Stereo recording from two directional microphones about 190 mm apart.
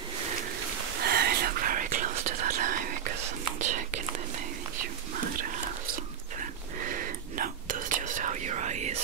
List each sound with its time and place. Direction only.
1.0 s whispering: 55° right (ahead or behind)
5.1 s whispering: 45° right (ahead or behind)